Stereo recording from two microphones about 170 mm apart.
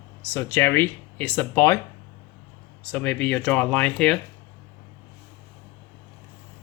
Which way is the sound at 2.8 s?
10° left (ahead or behind).